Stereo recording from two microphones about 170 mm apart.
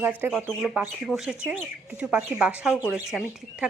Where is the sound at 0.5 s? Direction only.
Centre (ahead or behind).